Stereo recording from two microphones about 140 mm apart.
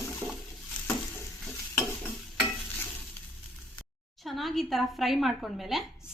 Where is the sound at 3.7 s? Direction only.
Centre (ahead or behind).